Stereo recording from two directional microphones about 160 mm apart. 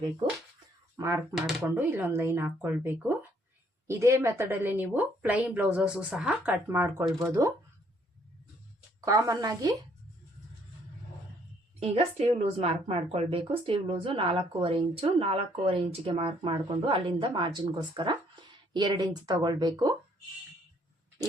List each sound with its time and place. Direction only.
0.9 s a woman's voice: 15° right (ahead or behind)
1.4 s speech: centre (ahead or behind)
1.6 s a woman's voice: 10° right (ahead or behind)
9.0 s speech: 20° right (ahead or behind)
11.8 s a woman's voice: 40° right (ahead or behind); by 20.0 s 25° right (ahead or behind)